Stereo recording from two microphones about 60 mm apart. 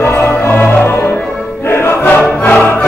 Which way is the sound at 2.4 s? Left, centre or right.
Left.